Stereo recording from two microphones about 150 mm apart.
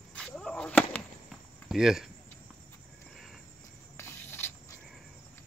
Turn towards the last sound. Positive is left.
turn(degrees=15)  # may be behind; listen again after turning